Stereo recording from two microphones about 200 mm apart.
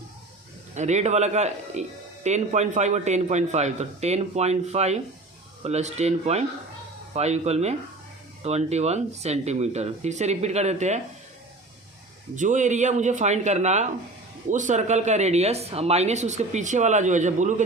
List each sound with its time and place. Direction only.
0.8 s speech: 35° right (ahead or behind)
12.4 s speech: 40° right (ahead or behind)